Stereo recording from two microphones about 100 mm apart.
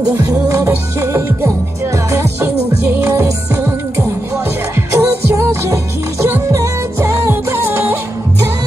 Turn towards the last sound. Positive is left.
turn(degrees=-25)  # may be behind; listen again after turning